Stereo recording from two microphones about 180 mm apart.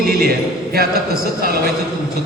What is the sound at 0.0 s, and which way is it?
A man's voice, 55° right (ahead or behind).